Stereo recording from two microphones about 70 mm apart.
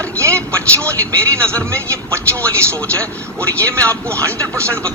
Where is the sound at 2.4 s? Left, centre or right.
Centre.